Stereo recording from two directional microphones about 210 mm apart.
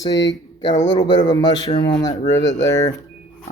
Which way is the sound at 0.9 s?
20° left (ahead or behind).